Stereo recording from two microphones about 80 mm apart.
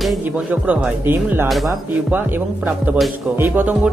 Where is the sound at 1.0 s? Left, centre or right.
Right.